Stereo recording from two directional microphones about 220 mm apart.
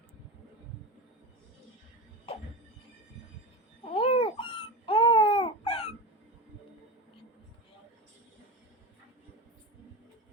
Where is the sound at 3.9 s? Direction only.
25° left (ahead or behind).